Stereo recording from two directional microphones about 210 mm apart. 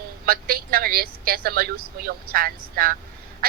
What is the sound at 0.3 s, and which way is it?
A man's voice, 45° right (ahead or behind).